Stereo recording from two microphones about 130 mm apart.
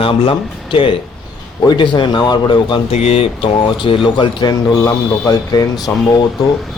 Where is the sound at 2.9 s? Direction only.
50° left (ahead or behind); by 5.6 s 30° left (ahead or behind).